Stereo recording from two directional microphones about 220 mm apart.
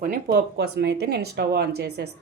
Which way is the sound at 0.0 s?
40° right (ahead or behind).